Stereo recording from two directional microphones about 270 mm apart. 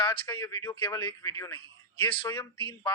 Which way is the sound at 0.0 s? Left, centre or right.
Centre.